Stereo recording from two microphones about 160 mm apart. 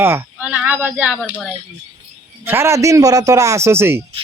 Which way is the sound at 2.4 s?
15° right (ahead or behind).